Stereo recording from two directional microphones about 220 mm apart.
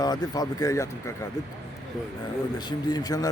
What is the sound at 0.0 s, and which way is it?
Speech, 15° left (ahead or behind).